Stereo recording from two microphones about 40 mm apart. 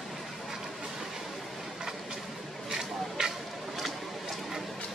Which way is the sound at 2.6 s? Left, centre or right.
Centre.